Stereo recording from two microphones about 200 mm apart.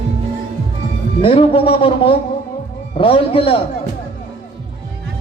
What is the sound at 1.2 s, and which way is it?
Speech, 25° left (ahead or behind).